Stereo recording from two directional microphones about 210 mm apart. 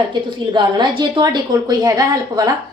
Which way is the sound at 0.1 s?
20° right (ahead or behind).